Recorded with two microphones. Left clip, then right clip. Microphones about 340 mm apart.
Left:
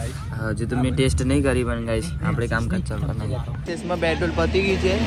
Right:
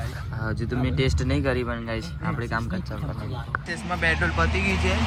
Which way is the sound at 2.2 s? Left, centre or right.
Left.